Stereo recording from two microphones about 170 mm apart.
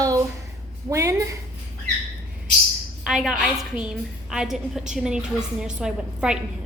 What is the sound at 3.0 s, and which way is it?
A woman's voice, centre (ahead or behind).